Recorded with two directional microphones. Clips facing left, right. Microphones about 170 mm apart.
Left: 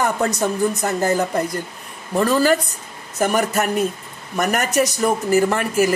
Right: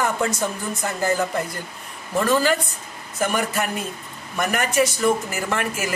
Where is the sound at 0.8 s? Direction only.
40° left (ahead or behind).